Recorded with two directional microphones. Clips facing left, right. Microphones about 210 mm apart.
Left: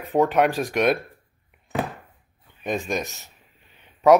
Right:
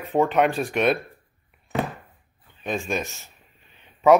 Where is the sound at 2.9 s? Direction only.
15° left (ahead or behind).